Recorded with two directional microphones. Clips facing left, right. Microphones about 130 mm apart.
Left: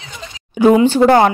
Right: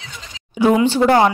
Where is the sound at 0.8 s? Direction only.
45° left (ahead or behind).